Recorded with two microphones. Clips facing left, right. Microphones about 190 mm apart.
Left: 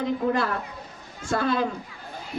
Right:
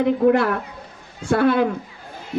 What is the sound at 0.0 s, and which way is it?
A woman's voice, 65° right (ahead or behind).